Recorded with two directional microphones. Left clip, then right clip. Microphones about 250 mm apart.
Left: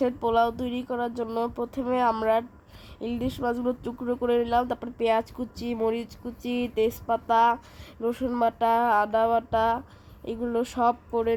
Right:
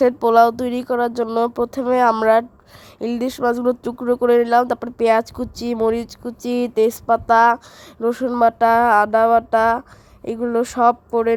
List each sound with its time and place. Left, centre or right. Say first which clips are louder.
0.0 s speech: right 10 dB; right